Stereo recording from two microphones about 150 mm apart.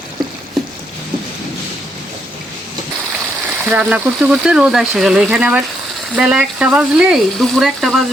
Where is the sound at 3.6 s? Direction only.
10° right (ahead or behind).